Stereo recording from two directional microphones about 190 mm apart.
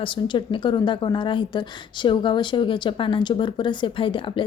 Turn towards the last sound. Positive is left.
turn(degrees=25)  # may be behind; listen again after turning